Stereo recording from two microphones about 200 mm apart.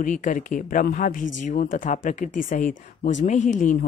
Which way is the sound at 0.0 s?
40° left (ahead or behind).